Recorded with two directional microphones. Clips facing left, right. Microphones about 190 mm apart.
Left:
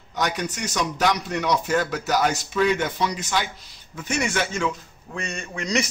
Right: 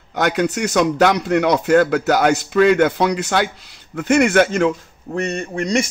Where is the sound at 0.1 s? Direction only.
65° right (ahead or behind).